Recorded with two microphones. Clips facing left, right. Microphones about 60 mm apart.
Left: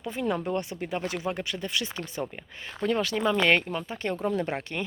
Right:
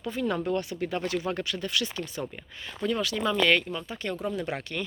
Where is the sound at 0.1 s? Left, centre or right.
Left.